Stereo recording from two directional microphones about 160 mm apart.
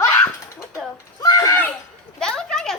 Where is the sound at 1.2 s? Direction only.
25° left (ahead or behind); by 2.7 s 5° left (ahead or behind).